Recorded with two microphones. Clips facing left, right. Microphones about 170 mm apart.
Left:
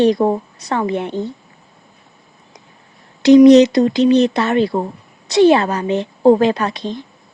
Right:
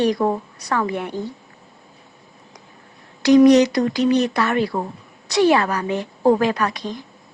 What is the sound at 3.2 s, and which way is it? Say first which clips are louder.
Speech: left 5 dB; 25° left (ahead or behind).